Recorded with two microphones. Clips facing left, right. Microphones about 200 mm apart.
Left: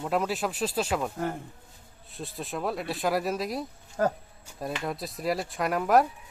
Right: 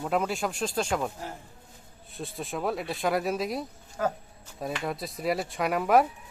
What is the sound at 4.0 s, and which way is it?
Speech, 40° left (ahead or behind).